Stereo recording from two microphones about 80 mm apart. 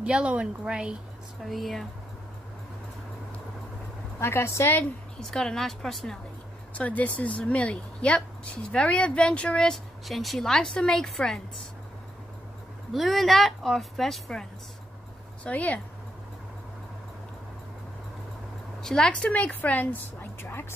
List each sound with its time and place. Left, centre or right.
0.0 s a woman's voice: centre
1.4 s a woman's voice: centre
4.2 s a woman's voice: left
5.2 s a woman's voice: centre
6.8 s speech: centre
12.9 s a woman's voice: centre
15.4 s speech: centre
18.8 s speech: centre; by 20.6 s left